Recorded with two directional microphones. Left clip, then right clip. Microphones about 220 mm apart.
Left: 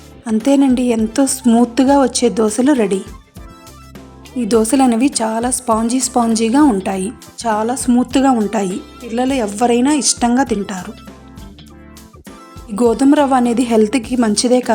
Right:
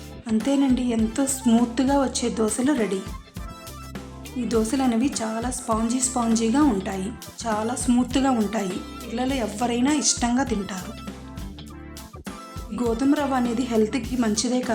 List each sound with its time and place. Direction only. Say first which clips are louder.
0.4 s a woman's voice: left 10 dB; 30° left (ahead or behind)
4.4 s a woman's voice: left 10 dB; 35° left (ahead or behind)
8.6 s speech: left 8 dB; centre (ahead or behind)
9.1 s speech: left 9 dB; 25° left (ahead or behind)
12.7 s a woman's voice: left 11 dB; 35° left (ahead or behind)